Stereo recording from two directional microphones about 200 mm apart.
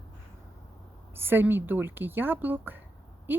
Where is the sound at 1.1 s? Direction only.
10° right (ahead or behind).